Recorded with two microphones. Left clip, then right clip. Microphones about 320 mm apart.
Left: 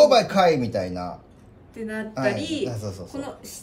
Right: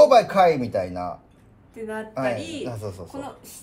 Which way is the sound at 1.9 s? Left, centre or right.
Centre.